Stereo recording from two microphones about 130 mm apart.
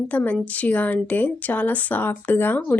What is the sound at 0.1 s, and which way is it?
A woman's voice, 10° left (ahead or behind).